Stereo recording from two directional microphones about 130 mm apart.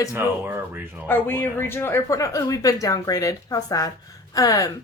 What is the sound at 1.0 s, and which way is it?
A woman's voice, 15° left (ahead or behind).